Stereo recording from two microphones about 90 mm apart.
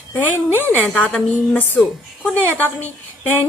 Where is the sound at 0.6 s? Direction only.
20° left (ahead or behind).